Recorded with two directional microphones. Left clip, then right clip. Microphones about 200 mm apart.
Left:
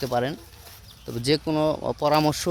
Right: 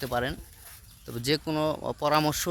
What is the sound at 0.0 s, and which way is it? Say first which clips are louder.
Speech: left 4 dB; centre (ahead or behind).